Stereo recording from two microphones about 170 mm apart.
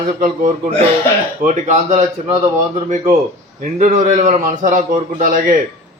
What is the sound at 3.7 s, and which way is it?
Speech, 45° right (ahead or behind).